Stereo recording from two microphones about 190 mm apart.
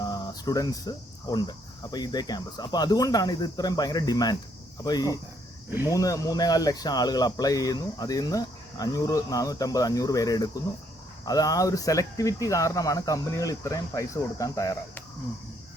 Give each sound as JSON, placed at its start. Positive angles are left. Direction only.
{"t": 0.0, "sound": "speech", "side_deg": 20}